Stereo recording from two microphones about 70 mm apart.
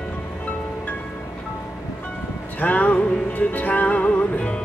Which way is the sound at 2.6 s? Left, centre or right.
Left.